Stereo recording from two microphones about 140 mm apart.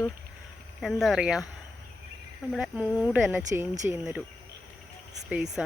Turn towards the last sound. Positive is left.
turn(degrees=-5)  # may be behind; listen again after turning